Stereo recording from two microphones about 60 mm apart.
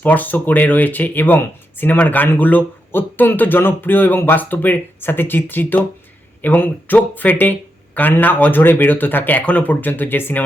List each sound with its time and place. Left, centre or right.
0.0 s speech: left